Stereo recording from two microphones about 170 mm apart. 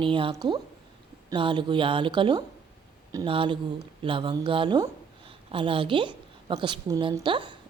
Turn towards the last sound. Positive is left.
turn(degrees=-30)  # may be behind; listen again after turning